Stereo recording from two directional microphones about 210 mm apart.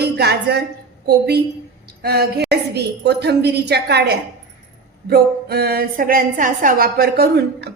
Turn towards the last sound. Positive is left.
turn(degrees=-50)  # may be behind; listen again after turning